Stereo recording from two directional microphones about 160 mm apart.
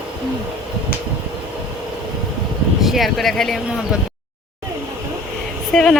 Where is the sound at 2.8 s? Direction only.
Centre (ahead or behind).